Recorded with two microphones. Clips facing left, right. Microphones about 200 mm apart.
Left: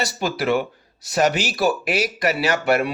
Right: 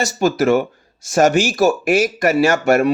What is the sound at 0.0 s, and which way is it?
Speech, 45° right (ahead or behind).